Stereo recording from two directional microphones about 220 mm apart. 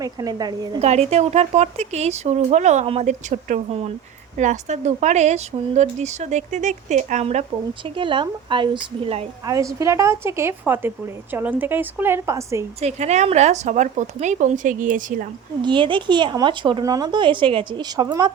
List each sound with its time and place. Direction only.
0.0 s a woman's voice: 15° right (ahead or behind)
0.8 s speech: 30° right (ahead or behind)
9.6 s a woman's voice: 15° right (ahead or behind)
12.8 s speech: 30° right (ahead or behind)
15.6 s speech: 20° right (ahead or behind)